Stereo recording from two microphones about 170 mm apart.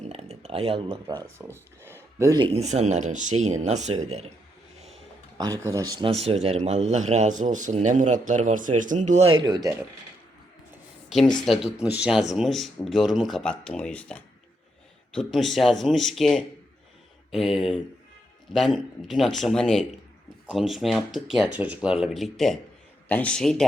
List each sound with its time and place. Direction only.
0.0 s a sound: 35° right (ahead or behind)
1.0 s speech: 25° right (ahead or behind)
1.4 s a sound: 15° right (ahead or behind)
2.1 s speech: 15° right (ahead or behind)
2.4 s speech: 35° right (ahead or behind)
5.4 s speech: 20° right (ahead or behind)
6.2 s speech: 35° right (ahead or behind)
9.5 s speech: 20° right (ahead or behind)
11.4 s speech: centre (ahead or behind)